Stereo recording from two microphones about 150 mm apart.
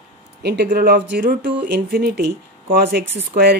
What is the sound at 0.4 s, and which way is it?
Speech, 90° right.